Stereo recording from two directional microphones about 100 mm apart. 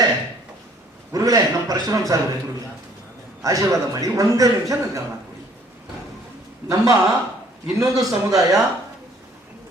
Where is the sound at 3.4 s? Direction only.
35° right (ahead or behind).